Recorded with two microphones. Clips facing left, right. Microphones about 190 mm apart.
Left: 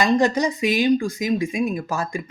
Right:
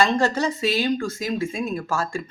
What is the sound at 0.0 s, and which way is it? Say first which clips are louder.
Speech: left 2 dB; 15° left (ahead or behind).